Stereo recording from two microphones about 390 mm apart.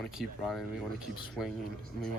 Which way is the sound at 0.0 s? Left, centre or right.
Centre.